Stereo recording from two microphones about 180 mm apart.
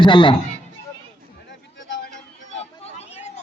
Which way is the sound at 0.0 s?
25° left (ahead or behind).